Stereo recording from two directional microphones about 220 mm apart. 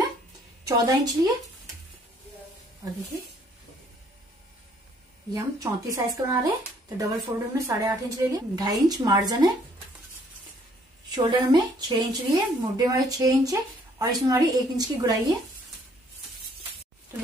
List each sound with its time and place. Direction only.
0.7 s a woman's voice: 15° right (ahead or behind)
5.3 s a woman's voice: 15° right (ahead or behind)
11.1 s a woman's voice: 20° right (ahead or behind)